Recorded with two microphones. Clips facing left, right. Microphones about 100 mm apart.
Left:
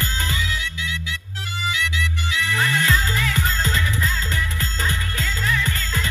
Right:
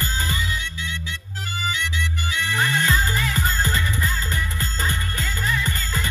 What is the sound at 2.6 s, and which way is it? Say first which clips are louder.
Music: even; 5° right (ahead or behind).